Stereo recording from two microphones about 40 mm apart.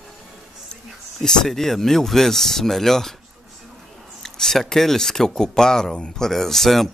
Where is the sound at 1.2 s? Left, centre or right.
Centre.